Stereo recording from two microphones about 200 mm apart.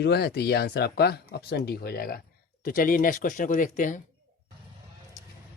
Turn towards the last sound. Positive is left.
turn(degrees=40)  # may be behind; listen again after turning